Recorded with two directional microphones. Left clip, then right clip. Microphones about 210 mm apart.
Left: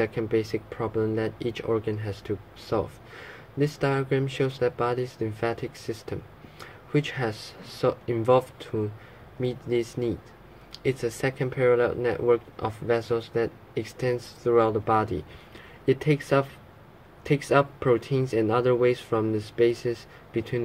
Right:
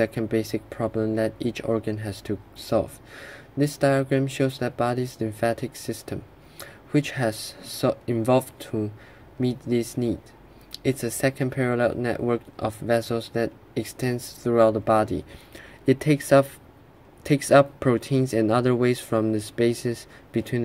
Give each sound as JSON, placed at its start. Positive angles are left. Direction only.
{"t": 0.0, "sound": "speech", "side_deg": -35}